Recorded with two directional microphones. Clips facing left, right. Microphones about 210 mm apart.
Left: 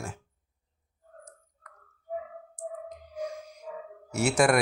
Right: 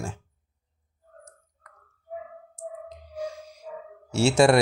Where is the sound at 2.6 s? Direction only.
30° right (ahead or behind).